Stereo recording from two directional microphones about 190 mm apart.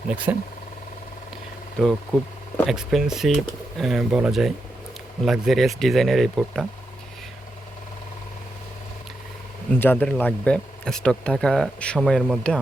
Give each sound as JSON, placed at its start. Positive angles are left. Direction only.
{"t": 0.3, "sound": "speech", "side_deg": -10}
{"t": 1.8, "sound": "speech", "side_deg": 5}
{"t": 9.7, "sound": "speech", "side_deg": 10}